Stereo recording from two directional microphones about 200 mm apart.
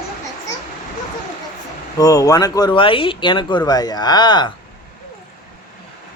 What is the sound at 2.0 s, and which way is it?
Speech, 15° left (ahead or behind).